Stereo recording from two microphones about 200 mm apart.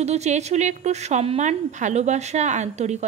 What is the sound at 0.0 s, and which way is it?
A woman's voice, 35° right (ahead or behind).